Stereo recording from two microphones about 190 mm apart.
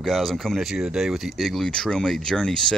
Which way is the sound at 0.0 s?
Centre (ahead or behind).